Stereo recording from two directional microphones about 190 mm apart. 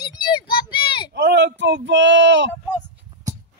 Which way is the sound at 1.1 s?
65° right (ahead or behind).